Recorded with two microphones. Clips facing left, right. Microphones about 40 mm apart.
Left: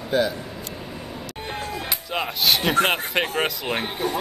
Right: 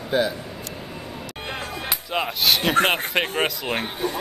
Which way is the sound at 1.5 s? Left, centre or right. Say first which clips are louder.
Left 1 dB; right.